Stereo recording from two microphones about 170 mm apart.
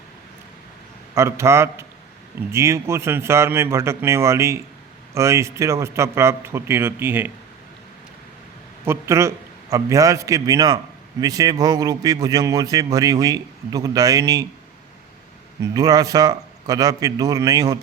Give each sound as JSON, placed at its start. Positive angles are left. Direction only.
{"t": 1.1, "sound": "speech", "side_deg": -15}
{"t": 8.9, "sound": "a man's voice", "side_deg": -15}
{"t": 15.7, "sound": "a man's voice", "side_deg": -20}